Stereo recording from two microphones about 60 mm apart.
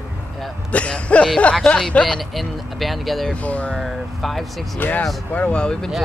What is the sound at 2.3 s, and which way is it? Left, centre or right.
Speech, centre.